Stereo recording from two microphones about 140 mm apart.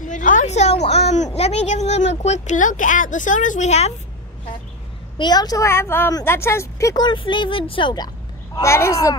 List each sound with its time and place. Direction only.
0.0 s a woman's voice: 65° left (ahead or behind)
5.1 s a woman's voice: 30° left (ahead or behind)
8.5 s a woman's voice: 20° left (ahead or behind)